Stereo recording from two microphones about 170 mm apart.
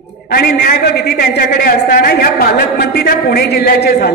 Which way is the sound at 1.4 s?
65° left (ahead or behind).